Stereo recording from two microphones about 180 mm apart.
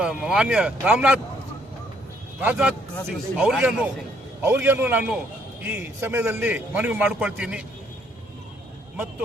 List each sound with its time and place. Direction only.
0.0 s speech: 5° right (ahead or behind)
2.4 s a man's voice: 5° right (ahead or behind)